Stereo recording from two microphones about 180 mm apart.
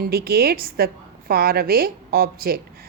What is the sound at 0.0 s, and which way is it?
A woman's voice, 60° right (ahead or behind).